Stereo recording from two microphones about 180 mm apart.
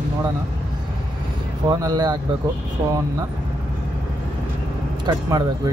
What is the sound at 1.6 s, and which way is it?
Speech, 20° right (ahead or behind).